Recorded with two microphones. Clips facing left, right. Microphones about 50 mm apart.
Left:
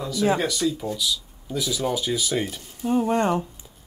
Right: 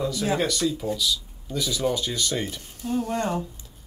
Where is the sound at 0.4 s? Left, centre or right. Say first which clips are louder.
Even; centre.